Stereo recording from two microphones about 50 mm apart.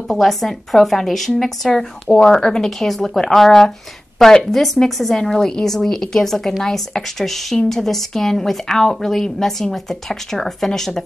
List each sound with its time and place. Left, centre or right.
0.1 s a woman's voice: centre